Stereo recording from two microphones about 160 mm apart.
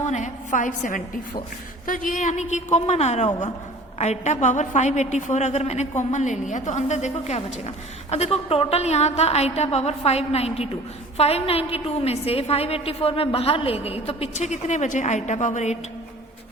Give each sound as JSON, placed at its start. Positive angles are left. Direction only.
{"t": 0.0, "sound": "a woman's voice", "side_deg": 50}